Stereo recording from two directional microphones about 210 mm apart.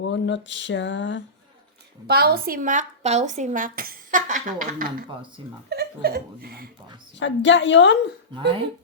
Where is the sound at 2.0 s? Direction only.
50° right (ahead or behind).